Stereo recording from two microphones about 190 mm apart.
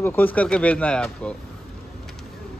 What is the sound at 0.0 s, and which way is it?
A man's voice, 10° left (ahead or behind).